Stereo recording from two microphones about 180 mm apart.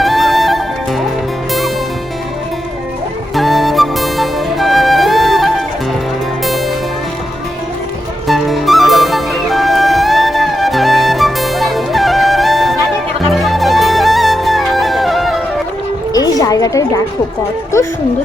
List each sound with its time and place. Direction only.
0.0 s music: centre (ahead or behind)
3.3 s music: centre (ahead or behind)
8.3 s music: centre (ahead or behind)
16.1 s a sound: 20° left (ahead or behind)